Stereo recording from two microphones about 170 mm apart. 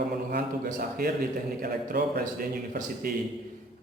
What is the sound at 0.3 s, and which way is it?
Speech, 60° right (ahead or behind).